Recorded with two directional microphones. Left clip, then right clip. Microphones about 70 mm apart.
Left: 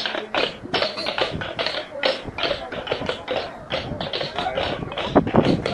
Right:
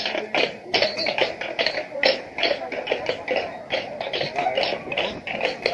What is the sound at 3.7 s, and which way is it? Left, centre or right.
Tap, centre.